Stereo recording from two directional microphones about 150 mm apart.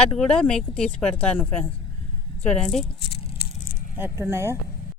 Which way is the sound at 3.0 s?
40° left (ahead or behind).